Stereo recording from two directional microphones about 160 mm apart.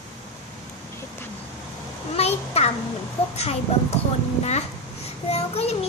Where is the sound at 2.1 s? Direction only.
40° left (ahead or behind).